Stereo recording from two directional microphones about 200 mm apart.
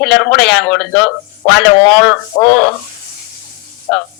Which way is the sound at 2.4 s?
55° left (ahead or behind).